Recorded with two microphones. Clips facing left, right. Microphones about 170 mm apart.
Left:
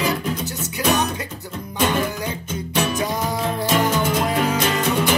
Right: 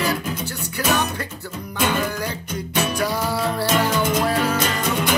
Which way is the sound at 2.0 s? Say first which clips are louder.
Even; 20° left (ahead or behind).